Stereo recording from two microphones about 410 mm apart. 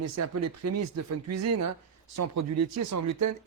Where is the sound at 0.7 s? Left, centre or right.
Right.